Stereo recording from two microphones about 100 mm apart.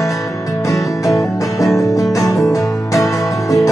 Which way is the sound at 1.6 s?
30° left (ahead or behind).